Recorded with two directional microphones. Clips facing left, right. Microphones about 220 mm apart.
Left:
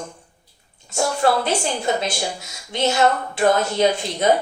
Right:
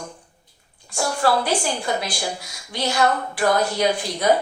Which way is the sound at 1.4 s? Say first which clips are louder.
Left 2 dB; 25° left (ahead or behind).